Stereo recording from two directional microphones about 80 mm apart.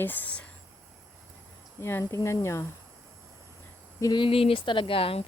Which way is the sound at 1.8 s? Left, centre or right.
Left.